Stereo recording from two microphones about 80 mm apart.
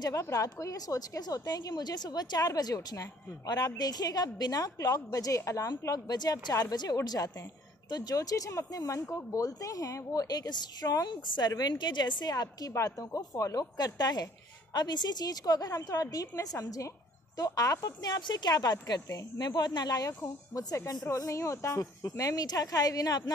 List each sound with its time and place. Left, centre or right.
0.1 s a woman's voice: left
6.0 s a woman's voice: left
11.1 s a woman's voice: left
18.9 s speech: left
19.3 s speech: left
20.5 s a woman's voice: left